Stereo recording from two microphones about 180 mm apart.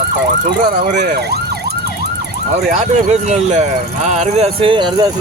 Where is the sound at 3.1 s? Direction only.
40° right (ahead or behind).